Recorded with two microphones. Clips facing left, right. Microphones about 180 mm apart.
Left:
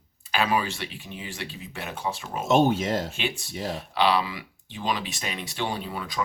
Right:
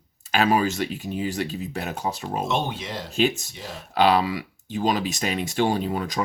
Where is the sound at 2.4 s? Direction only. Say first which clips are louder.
Left 8 dB; 45° left (ahead or behind).